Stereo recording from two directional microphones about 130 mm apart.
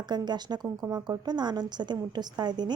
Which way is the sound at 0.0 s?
35° right (ahead or behind).